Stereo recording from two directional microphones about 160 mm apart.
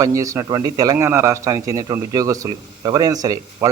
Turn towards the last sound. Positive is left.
turn(degrees=-20)  # may be behind; listen again after turning